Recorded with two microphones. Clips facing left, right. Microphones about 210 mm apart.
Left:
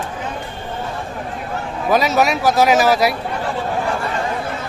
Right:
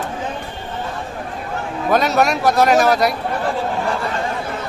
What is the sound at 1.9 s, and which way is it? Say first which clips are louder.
A man's voice: even; centre (ahead or behind).